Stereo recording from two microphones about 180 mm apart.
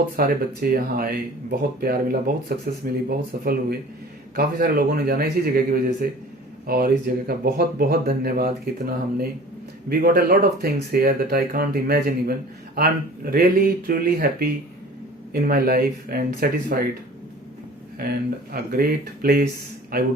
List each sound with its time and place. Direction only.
0.2 s speech: 55° right (ahead or behind)
9.9 s speech: 60° right (ahead or behind)
18.0 s speech: 60° right (ahead or behind)